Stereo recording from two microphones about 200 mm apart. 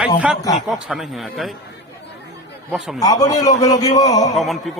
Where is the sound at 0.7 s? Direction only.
Centre (ahead or behind).